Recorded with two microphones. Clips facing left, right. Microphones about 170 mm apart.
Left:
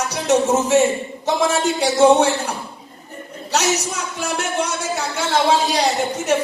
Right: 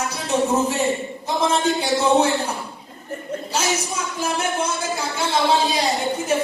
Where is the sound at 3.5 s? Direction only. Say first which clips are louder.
Left 4 dB; 75° left (ahead or behind).